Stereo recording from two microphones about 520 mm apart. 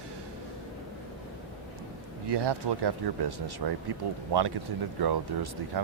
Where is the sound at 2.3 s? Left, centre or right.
Right.